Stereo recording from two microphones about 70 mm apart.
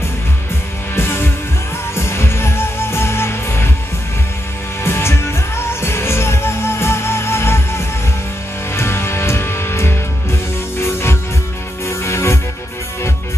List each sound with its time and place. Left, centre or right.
0.9 s music: left
4.8 s music: left